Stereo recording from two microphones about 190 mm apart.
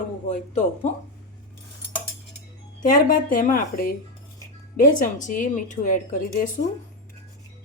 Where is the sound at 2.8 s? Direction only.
45° left (ahead or behind).